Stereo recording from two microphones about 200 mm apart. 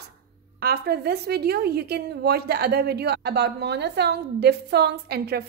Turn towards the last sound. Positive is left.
turn(degrees=-50)  # may be behind; listen again after turning